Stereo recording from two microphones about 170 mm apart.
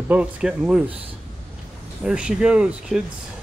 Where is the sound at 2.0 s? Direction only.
5° right (ahead or behind).